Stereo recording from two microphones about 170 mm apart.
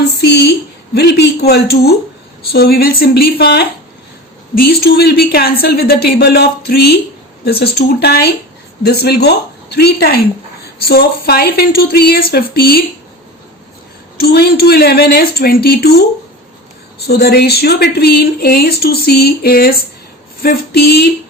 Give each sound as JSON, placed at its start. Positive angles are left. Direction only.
{"t": 0.2, "sound": "a sound", "side_deg": 75}
{"t": 0.9, "sound": "speech", "side_deg": 75}
{"t": 14.2, "sound": "speech", "side_deg": 65}
{"t": 17.1, "sound": "speech", "side_deg": 65}